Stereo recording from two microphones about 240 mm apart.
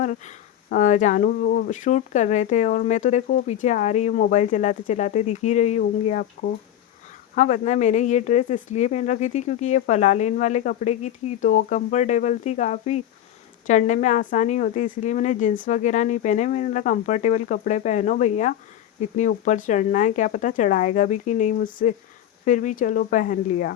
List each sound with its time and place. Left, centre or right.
0.0 s speech: left